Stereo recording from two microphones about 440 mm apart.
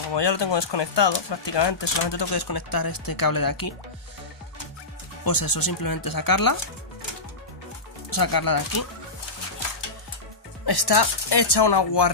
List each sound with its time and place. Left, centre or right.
0.1 s speech: left
5.2 s speech: left
8.1 s speech: left
10.6 s speech: left